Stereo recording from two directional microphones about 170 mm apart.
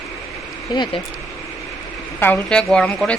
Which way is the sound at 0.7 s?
25° left (ahead or behind).